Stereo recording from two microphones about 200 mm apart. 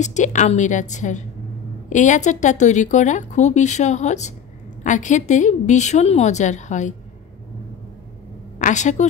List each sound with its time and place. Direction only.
0.0 s a woman's voice: 35° left (ahead or behind)
8.5 s a woman's voice: 40° left (ahead or behind)